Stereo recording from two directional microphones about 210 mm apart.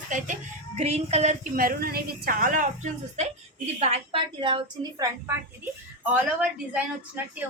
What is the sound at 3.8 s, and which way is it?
Speech, 30° right (ahead or behind).